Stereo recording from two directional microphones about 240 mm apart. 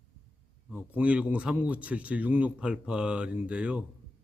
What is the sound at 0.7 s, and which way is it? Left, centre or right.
Speech, centre.